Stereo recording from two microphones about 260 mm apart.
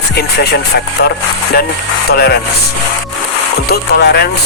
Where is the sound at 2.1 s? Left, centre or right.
Left.